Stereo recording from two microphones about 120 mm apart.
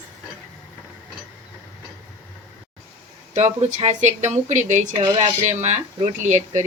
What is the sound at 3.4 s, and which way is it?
Speech, 70° right (ahead or behind).